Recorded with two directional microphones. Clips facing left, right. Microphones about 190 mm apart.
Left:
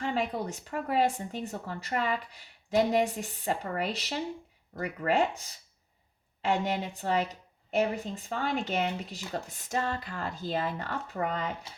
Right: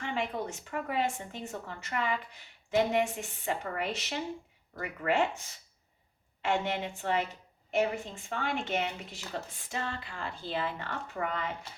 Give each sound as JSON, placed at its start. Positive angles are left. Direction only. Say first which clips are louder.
{"t": 0.0, "sound": "speech", "louder": "left 3 dB", "side_deg": 35}